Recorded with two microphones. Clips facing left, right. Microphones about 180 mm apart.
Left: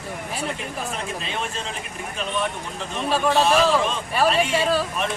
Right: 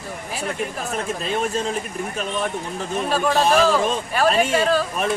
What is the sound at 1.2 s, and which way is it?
Speech, 45° right (ahead or behind).